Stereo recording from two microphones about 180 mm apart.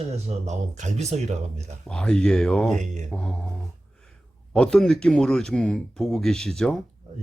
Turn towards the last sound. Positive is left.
turn(degrees=0)  # may be behind; listen again after turning